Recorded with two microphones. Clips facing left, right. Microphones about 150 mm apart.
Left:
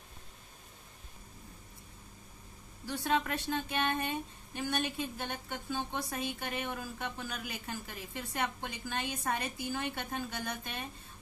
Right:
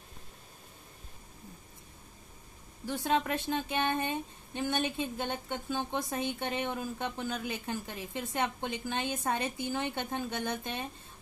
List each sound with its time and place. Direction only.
2.9 s speech: 20° right (ahead or behind)